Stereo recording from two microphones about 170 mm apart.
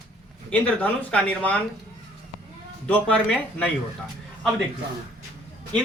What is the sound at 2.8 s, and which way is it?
Speech, 10° left (ahead or behind).